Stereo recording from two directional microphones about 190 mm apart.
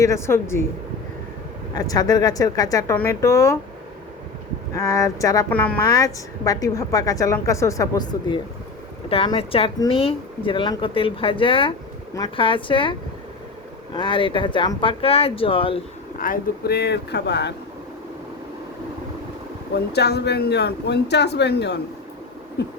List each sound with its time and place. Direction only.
0.0 s a woman's voice: 15° left (ahead or behind)
1.7 s speech: 20° left (ahead or behind)
4.7 s a woman's voice: 15° left (ahead or behind)
5.8 s a woman's voice: 20° left (ahead or behind)
16.1 s speech: 45° left (ahead or behind); by 17.5 s 60° left (ahead or behind)
19.7 s speech: 60° left (ahead or behind)